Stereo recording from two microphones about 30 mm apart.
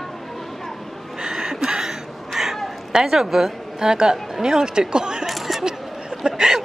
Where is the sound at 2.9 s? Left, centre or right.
Centre.